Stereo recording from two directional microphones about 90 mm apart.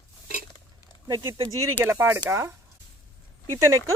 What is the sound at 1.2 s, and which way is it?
Speech, 40° right (ahead or behind).